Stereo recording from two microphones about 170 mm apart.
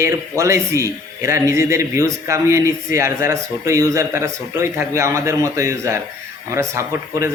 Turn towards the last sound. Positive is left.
turn(degrees=-15)  # may be behind; listen again after turning